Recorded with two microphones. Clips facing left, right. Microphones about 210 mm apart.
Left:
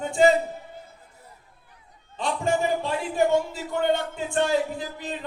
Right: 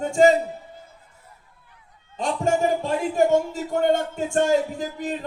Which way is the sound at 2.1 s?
45° right (ahead or behind).